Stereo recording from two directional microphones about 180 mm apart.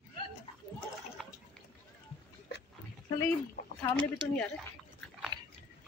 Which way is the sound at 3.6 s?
55° left (ahead or behind).